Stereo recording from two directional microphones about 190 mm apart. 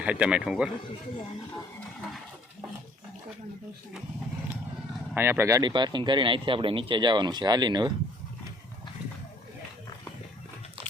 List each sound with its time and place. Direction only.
0.0 s a man's voice: 5° right (ahead or behind)
5.1 s speech: 10° right (ahead or behind)